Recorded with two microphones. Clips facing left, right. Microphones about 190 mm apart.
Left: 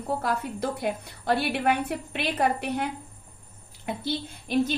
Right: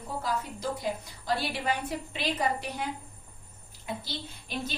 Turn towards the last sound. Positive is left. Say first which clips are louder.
# left 11 dB
turn(degrees=55)  # may be behind; listen again after turning